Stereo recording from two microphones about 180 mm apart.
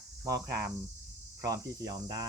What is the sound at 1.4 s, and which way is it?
Speech, 20° right (ahead or behind).